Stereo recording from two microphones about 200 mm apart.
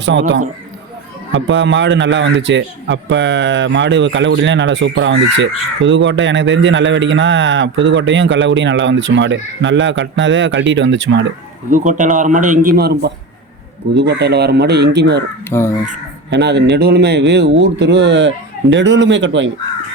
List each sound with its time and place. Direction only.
0.0 s a man's voice: 65° right (ahead or behind)
11.7 s a man's voice: 40° right (ahead or behind); by 15.2 s 60° right (ahead or behind)
15.4 s speech: 10° left (ahead or behind)
16.3 s a man's voice: 60° right (ahead or behind)